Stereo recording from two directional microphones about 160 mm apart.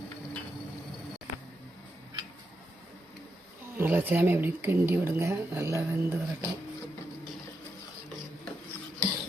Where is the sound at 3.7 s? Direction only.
10° right (ahead or behind).